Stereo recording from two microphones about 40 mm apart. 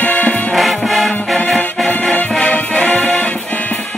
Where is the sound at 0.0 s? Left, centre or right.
Left.